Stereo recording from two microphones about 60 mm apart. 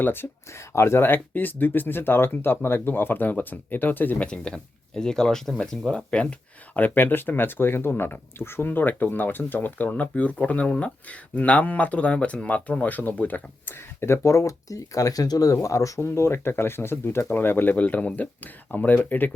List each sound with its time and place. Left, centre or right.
0.0 s speech: left
4.2 s speech: centre
6.7 s speech: left
14.2 s speech: left
15.5 s speech: left
16.0 s speech: left